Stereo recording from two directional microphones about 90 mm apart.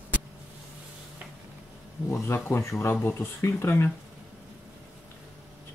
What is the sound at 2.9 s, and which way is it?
Speech, 20° left (ahead or behind).